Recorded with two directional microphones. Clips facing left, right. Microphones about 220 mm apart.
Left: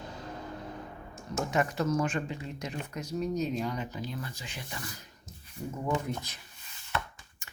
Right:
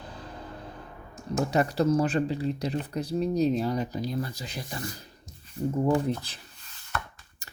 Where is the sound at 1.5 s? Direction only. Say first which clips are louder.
Right 5 dB; 35° right (ahead or behind).